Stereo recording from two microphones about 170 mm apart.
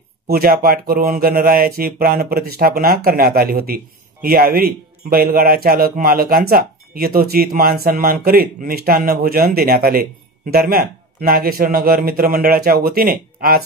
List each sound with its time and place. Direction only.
0.3 s speech: 60° right (ahead or behind)